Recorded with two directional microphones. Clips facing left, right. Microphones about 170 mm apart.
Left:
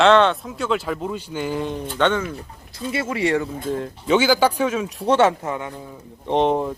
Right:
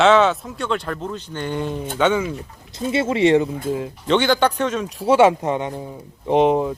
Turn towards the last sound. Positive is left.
turn(degrees=0)  # may be behind; listen again after turning